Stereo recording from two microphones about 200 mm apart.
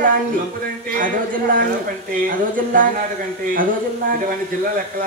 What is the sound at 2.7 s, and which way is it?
Speech, 45° right (ahead or behind).